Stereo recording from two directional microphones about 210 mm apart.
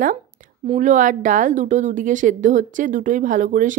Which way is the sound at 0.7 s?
35° right (ahead or behind).